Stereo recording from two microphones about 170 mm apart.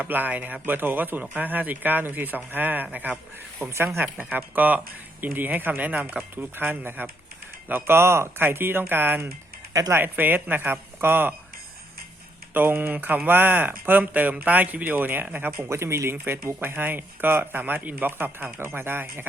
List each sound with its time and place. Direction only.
0.0 s speech: 10° right (ahead or behind)
12.5 s speech: 15° right (ahead or behind)